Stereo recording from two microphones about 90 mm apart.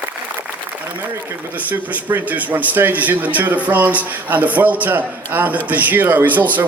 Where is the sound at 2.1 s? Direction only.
20° right (ahead or behind).